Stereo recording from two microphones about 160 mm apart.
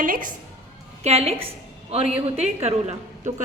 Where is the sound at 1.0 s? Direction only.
40° right (ahead or behind).